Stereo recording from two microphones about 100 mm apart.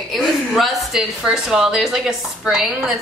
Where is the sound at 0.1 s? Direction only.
Centre (ahead or behind).